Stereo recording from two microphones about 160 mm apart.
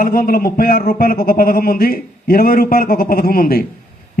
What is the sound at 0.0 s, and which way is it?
A man's voice, 65° left (ahead or behind).